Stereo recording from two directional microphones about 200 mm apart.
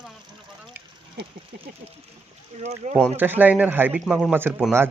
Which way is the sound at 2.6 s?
35° right (ahead or behind).